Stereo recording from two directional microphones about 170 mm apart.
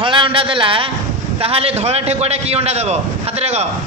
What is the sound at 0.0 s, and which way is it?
A man's voice, 30° right (ahead or behind).